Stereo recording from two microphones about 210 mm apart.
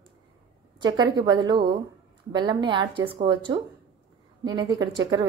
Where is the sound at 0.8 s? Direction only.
20° right (ahead or behind).